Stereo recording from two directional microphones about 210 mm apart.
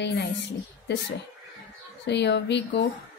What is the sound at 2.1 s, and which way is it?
Speech, 55° left (ahead or behind).